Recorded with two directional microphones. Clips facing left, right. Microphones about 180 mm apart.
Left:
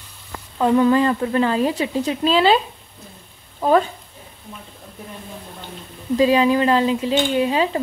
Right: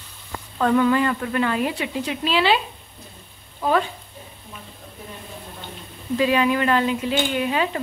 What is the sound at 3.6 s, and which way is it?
Speech, 35° left (ahead or behind).